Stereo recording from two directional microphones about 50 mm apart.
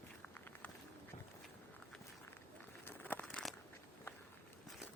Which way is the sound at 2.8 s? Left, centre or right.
Left.